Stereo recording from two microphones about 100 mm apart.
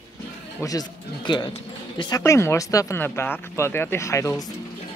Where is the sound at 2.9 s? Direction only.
20° left (ahead or behind).